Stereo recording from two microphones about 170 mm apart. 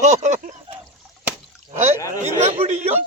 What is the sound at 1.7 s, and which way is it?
A man's voice, 40° right (ahead or behind).